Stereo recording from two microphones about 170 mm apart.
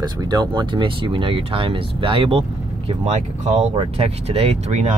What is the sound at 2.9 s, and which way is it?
Speech, 40° right (ahead or behind).